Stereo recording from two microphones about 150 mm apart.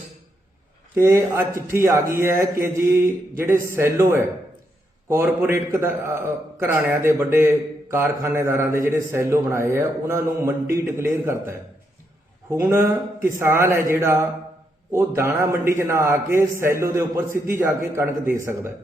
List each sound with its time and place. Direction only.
0.9 s a man's voice: 20° right (ahead or behind)